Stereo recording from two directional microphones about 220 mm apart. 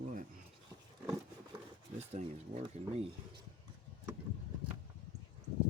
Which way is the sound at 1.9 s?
30° right (ahead or behind).